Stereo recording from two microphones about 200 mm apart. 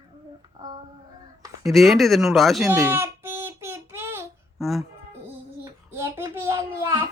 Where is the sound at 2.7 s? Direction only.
10° right (ahead or behind).